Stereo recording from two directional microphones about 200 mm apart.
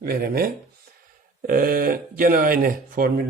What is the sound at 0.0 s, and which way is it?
Speech, 50° right (ahead or behind).